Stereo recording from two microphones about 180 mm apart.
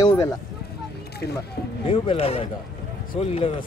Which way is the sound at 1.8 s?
30° left (ahead or behind).